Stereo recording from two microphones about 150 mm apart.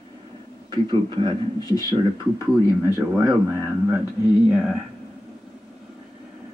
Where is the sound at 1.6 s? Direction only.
25° left (ahead or behind).